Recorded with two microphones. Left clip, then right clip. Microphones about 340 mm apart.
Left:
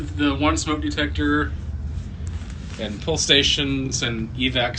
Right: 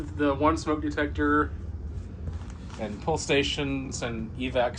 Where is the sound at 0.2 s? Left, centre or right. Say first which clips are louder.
Left 3 dB; centre.